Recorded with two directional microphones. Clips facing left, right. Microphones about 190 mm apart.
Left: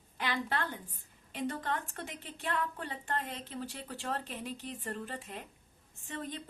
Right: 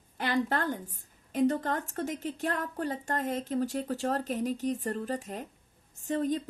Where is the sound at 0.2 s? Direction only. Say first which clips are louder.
Right 6 dB; 45° right (ahead or behind).